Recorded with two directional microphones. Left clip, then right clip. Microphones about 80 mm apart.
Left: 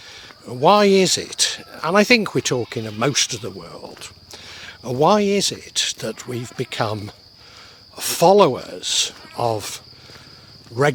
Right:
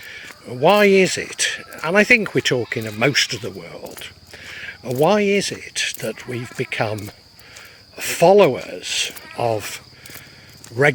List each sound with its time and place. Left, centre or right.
0.4 s speech: left
7.9 s speech: left